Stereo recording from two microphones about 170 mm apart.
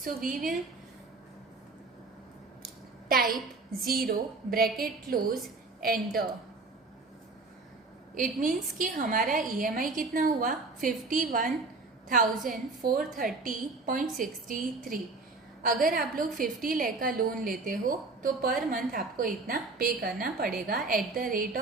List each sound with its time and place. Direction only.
0.0 s a woman's voice: 55° right (ahead or behind)
3.1 s a woman's voice: 60° right (ahead or behind)
8.1 s a woman's voice: 50° right (ahead or behind)